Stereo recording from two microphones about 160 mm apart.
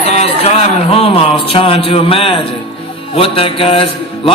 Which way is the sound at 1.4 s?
35° left (ahead or behind).